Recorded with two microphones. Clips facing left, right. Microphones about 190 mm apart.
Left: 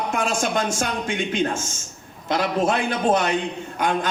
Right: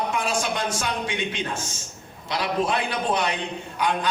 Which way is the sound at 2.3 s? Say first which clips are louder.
Left 3 dB; 45° left (ahead or behind).